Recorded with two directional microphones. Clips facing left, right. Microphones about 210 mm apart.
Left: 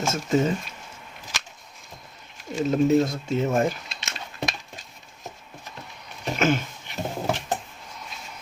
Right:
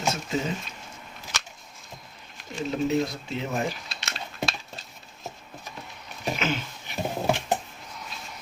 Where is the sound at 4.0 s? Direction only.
20° left (ahead or behind).